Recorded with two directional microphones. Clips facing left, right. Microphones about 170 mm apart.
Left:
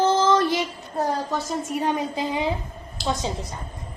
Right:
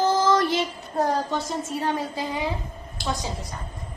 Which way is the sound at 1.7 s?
15° left (ahead or behind).